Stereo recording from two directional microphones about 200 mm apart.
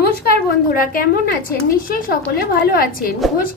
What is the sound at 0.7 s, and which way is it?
A woman's voice, 45° left (ahead or behind).